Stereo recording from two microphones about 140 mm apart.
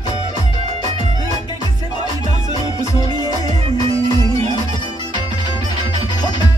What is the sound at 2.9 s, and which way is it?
Music, 25° left (ahead or behind).